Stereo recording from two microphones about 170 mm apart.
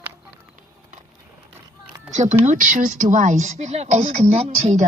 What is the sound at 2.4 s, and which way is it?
Speech, 50° right (ahead or behind).